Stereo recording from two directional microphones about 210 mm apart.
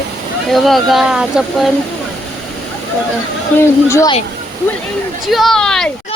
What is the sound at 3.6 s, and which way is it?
Speech, 15° left (ahead or behind).